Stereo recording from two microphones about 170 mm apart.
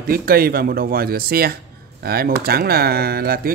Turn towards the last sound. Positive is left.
turn(degrees=-65)  # may be behind; listen again after turning